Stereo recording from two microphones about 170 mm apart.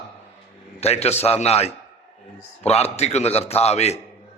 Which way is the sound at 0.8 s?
40° left (ahead or behind).